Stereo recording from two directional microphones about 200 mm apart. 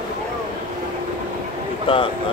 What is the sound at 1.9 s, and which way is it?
Speech, 25° left (ahead or behind).